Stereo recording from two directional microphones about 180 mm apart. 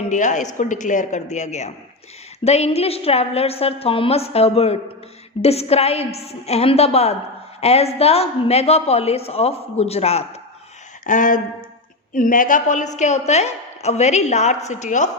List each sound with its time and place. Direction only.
0.1 s a woman's voice: 45° left (ahead or behind)
11.0 s a woman's voice: 45° left (ahead or behind)